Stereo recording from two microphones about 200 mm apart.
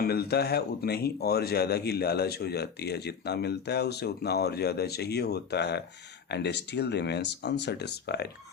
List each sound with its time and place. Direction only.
0.0 s speech: 50° left (ahead or behind)